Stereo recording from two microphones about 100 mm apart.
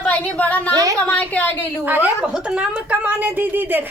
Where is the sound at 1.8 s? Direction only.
20° right (ahead or behind).